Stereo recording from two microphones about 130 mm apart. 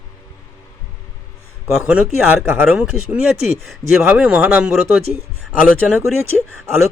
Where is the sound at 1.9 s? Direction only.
5° right (ahead or behind).